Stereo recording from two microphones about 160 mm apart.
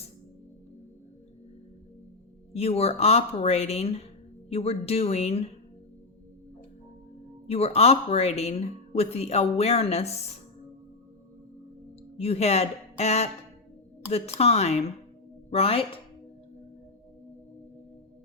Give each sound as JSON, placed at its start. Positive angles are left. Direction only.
{"t": 2.5, "sound": "speech", "side_deg": 40}
{"t": 7.4, "sound": "speech", "side_deg": 40}
{"t": 12.1, "sound": "speech", "side_deg": 40}
{"t": 14.3, "sound": "speech", "side_deg": 40}